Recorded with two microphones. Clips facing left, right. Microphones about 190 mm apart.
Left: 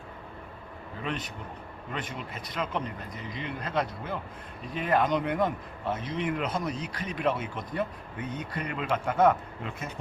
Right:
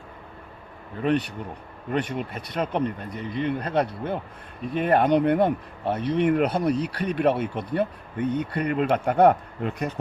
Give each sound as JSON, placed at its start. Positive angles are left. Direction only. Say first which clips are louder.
{"t": 1.9, "sound": "speech", "louder": "right 10 dB", "side_deg": -55}